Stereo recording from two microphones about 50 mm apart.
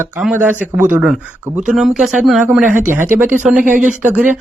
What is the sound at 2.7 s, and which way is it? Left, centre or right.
Speech, right.